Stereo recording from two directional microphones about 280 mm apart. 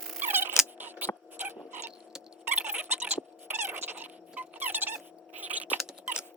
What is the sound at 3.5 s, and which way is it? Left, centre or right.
Squeak, right.